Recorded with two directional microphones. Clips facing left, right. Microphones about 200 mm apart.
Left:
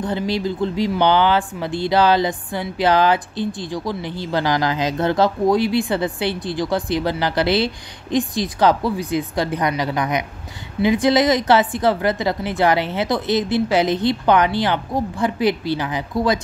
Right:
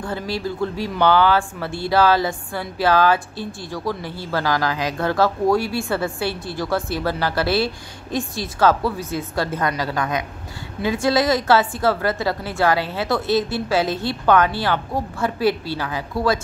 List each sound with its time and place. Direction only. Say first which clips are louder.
0.0 s speech: left 4 dB; 20° left (ahead or behind)